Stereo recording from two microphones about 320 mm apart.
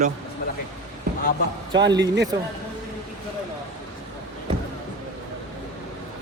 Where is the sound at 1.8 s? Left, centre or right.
Right.